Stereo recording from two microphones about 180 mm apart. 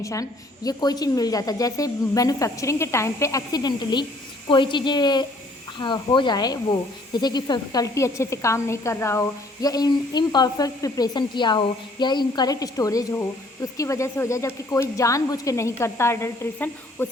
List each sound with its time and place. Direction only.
0.0 s speech: 20° left (ahead or behind)